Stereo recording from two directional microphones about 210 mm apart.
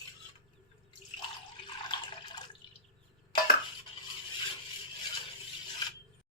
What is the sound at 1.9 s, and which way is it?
Water, 20° left (ahead or behind).